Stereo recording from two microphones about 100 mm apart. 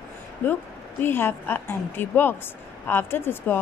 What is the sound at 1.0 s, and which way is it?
A woman's voice, 20° left (ahead or behind).